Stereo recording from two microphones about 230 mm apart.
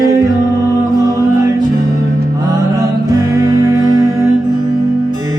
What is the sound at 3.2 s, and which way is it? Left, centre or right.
Music, centre.